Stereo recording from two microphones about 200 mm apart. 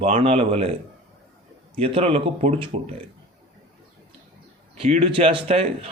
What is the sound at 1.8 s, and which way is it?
Speech, 30° right (ahead or behind).